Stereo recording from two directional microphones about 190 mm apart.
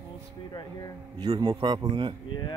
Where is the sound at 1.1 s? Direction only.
25° right (ahead or behind).